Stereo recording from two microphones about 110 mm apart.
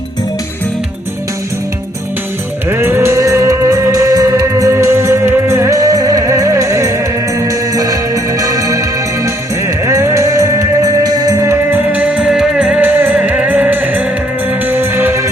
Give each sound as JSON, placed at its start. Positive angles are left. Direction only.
{"t": 2.6, "sound": "music", "side_deg": -20}
{"t": 11.7, "sound": "music", "side_deg": -15}